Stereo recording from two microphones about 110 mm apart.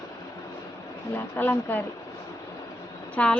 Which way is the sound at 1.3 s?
20° left (ahead or behind).